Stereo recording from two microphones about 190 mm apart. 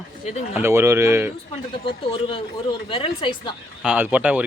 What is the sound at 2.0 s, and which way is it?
Speech, 25° left (ahead or behind).